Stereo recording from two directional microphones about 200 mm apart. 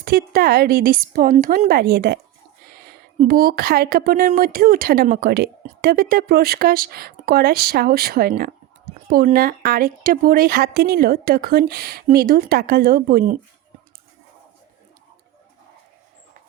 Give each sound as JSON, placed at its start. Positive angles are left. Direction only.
{"t": 0.0, "sound": "speech", "side_deg": -50}